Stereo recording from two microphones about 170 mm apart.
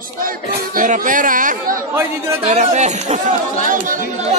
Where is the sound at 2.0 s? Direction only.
15° right (ahead or behind).